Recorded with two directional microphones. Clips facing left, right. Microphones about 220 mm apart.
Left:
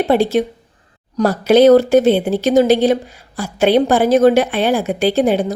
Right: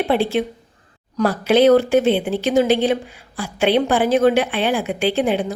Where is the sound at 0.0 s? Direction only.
40° left (ahead or behind).